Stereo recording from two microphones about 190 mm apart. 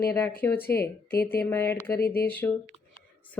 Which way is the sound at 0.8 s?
55° left (ahead or behind).